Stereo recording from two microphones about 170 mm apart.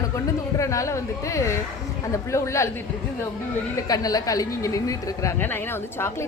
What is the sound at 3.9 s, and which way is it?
A woman's voice, 20° left (ahead or behind).